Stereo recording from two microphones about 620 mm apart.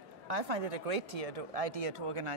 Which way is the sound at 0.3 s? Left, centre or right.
Right.